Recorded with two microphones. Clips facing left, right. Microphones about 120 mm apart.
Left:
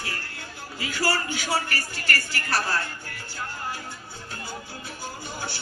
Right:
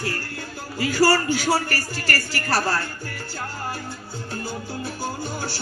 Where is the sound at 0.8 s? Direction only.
35° right (ahead or behind).